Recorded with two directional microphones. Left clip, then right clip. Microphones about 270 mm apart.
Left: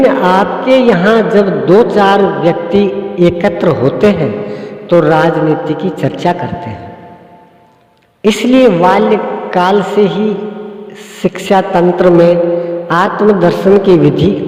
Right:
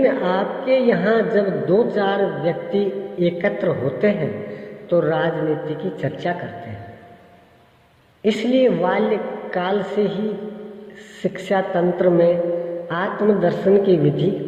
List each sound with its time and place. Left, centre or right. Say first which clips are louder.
0.0 s a man's voice: left 10 dB; left
8.2 s a man's voice: left 9 dB; left